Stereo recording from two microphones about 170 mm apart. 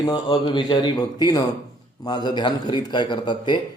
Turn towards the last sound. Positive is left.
turn(degrees=25)  # may be behind; listen again after turning